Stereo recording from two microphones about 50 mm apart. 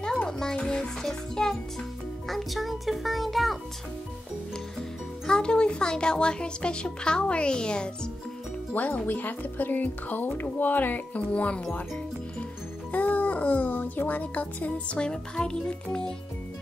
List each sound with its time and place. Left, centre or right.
0.0 s music: centre
0.6 s a child's voice: centre
5.2 s speech: centre
8.7 s speech: left
12.9 s speech: left
15.0 s speech: centre